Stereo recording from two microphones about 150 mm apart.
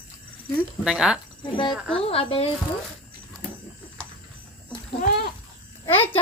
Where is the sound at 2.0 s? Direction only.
40° left (ahead or behind).